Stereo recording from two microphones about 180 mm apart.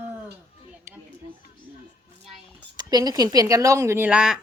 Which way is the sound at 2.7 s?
20° right (ahead or behind).